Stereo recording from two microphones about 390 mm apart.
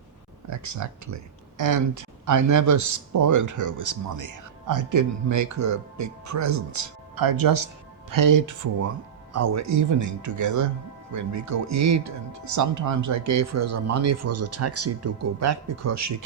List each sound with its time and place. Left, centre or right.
0.4 s speech: right